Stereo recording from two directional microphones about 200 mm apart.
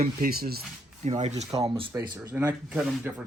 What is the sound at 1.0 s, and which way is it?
Speech, 35° right (ahead or behind).